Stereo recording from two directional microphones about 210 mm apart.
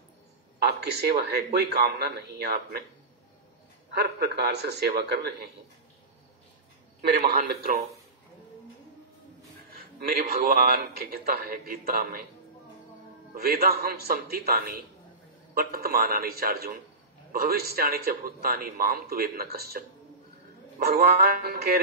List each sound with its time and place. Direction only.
0.6 s a sound: 50° right (ahead or behind)
1.3 s a man's voice: 50° right (ahead or behind)
3.9 s a man's voice: 50° right (ahead or behind)
7.0 s a man's voice: 45° right (ahead or behind)
9.7 s a man's voice: 45° right (ahead or behind)
13.3 s a man's voice: 45° right (ahead or behind)
20.8 s a man's voice: 45° right (ahead or behind)